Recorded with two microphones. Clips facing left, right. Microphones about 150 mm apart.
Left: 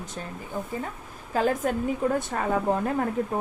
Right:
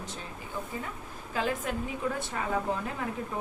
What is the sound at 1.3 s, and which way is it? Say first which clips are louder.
A woman's voice: left 7 dB; 45° left (ahead or behind).